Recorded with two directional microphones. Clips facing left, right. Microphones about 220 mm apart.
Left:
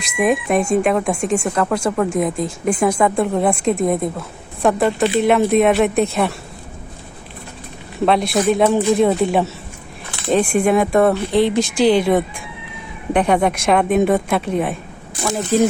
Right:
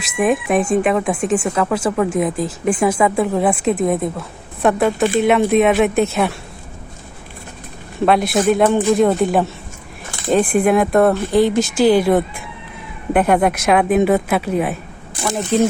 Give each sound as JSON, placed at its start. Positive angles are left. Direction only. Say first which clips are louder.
{"t": 0.0, "sound": "speech", "louder": "even", "side_deg": -5}
{"t": 8.0, "sound": "speech", "louder": "right 1 dB", "side_deg": 0}
{"t": 13.1, "sound": "speech", "louder": "right 1 dB", "side_deg": -5}